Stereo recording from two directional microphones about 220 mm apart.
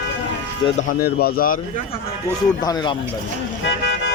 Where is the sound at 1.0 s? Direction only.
45° left (ahead or behind).